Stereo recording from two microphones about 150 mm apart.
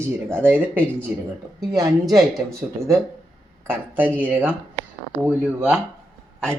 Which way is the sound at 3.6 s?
15° right (ahead or behind).